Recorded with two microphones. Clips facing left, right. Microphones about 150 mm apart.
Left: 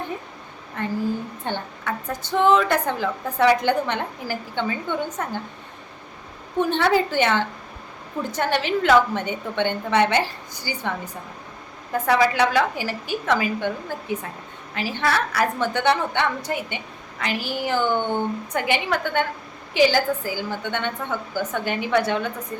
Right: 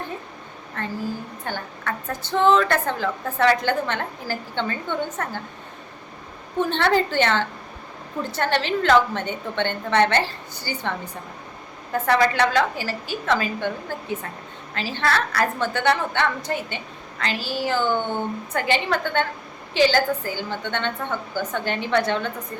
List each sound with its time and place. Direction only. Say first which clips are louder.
0.8 s a woman's voice: left 3 dB; 15° left (ahead or behind)
1.5 s a woman's voice: left 2 dB; 25° left (ahead or behind)
1.8 s a woman's voice: left 1 dB; 10° left (ahead or behind)
6.7 s a woman's voice: left 1 dB; 10° left (ahead or behind)
14.8 s a woman's voice: left 1 dB; 15° left (ahead or behind)